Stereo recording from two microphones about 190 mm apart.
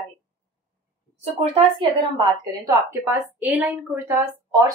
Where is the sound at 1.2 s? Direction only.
30° right (ahead or behind).